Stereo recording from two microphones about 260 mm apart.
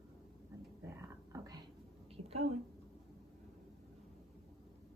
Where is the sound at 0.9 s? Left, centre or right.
Centre.